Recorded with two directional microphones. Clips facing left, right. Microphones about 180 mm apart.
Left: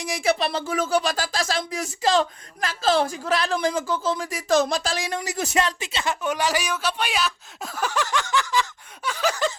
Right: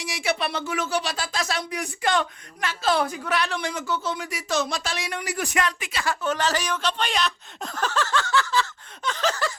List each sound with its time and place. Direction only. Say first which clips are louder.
0.3 s a man's voice: left 3 dB; 30° left (ahead or behind); by 9.5 s 10° left (ahead or behind)